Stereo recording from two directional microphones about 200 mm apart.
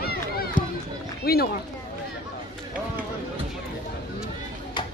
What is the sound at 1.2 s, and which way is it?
Speech, 50° left (ahead or behind).